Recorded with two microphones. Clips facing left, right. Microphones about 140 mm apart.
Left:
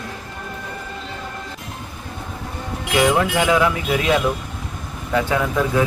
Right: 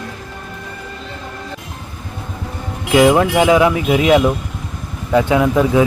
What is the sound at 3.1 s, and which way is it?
Speech, 20° right (ahead or behind).